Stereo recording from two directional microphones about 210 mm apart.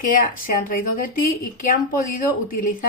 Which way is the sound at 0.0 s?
40° left (ahead or behind).